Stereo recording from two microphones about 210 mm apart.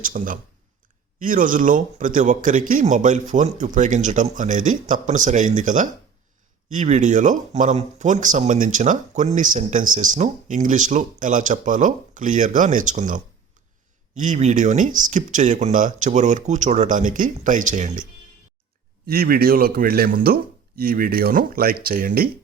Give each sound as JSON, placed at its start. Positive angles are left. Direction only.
{"t": 0.0, "sound": "speech", "side_deg": -40}
{"t": 19.0, "sound": "speech", "side_deg": -45}